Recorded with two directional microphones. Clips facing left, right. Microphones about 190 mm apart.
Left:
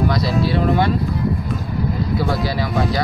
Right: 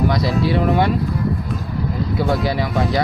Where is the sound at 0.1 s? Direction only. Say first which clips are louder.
Right 1 dB; 20° right (ahead or behind).